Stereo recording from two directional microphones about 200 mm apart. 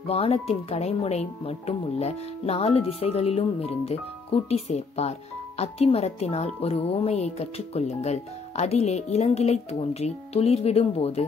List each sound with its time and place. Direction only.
0.0 s speech: 30° left (ahead or behind)